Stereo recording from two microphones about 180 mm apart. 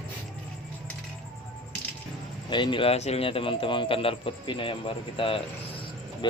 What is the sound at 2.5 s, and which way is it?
A man's voice, 25° left (ahead or behind).